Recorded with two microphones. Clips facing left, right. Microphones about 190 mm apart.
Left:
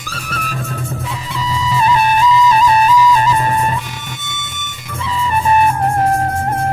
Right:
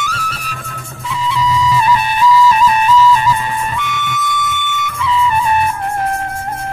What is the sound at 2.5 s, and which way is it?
Music, 35° left (ahead or behind).